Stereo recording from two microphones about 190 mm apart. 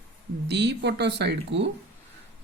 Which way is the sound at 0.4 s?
65° right (ahead or behind).